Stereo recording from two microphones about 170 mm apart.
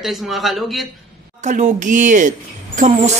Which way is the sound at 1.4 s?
45° right (ahead or behind).